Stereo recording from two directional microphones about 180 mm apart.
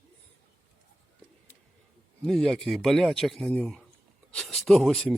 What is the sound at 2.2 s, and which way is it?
Speech, centre (ahead or behind).